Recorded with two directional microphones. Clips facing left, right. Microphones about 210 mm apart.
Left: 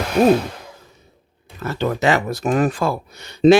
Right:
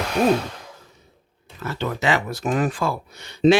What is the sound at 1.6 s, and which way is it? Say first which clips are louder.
Speech: left 5 dB; 45° left (ahead or behind).